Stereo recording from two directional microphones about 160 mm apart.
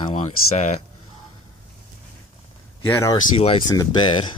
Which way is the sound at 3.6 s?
25° left (ahead or behind).